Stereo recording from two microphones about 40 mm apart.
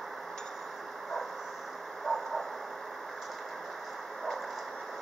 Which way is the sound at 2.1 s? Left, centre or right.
Centre.